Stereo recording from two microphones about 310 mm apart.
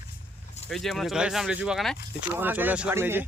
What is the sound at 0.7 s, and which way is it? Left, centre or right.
Speech, centre.